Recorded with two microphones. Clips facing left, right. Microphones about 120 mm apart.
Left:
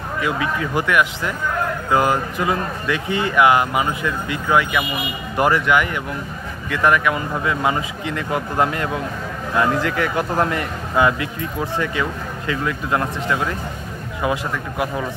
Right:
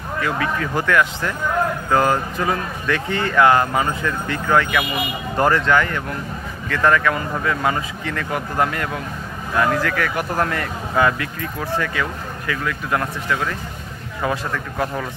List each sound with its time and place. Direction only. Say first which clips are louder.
0.2 s a man's voice: even; 15° left (ahead or behind)